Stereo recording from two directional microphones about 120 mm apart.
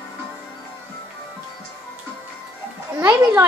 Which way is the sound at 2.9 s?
20° right (ahead or behind).